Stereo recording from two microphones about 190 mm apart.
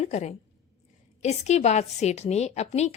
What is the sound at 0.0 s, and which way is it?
A woman's voice, 35° left (ahead or behind).